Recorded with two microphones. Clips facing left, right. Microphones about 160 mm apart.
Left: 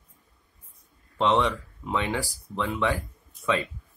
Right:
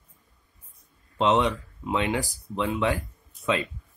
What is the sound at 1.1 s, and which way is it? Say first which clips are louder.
Speech: right 1 dB; 20° right (ahead or behind).